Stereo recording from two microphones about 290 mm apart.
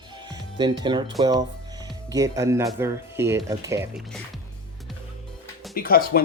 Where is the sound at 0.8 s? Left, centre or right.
Centre.